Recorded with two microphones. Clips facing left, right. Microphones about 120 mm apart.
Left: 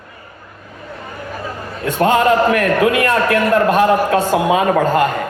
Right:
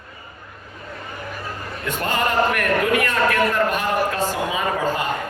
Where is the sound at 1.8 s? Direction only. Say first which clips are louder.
Left 10 dB; 90° left.